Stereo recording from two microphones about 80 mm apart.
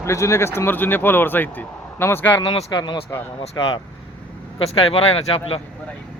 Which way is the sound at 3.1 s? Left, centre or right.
Left.